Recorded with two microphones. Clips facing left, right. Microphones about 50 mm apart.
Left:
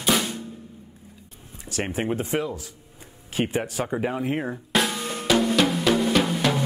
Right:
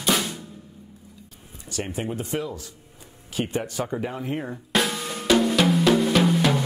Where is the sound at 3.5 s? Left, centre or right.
Centre.